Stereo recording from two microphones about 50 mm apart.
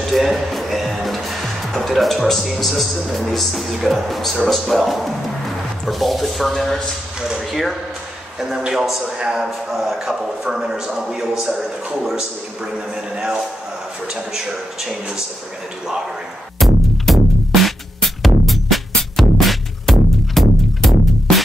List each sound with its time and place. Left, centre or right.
0.0 s music: centre
1.8 s speech: centre
7.2 s a man's voice: centre
12.9 s a man's voice: centre
16.5 s music: centre